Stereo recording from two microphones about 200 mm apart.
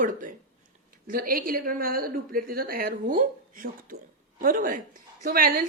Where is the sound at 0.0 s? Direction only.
40° right (ahead or behind).